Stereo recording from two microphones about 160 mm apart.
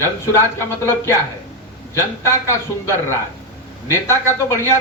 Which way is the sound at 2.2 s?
15° left (ahead or behind).